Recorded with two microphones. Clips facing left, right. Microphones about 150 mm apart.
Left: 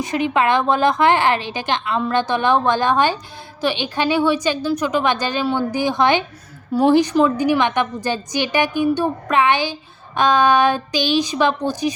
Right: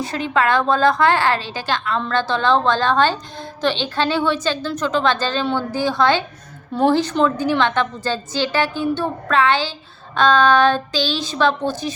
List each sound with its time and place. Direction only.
0.0 s a woman's voice: 20° left (ahead or behind)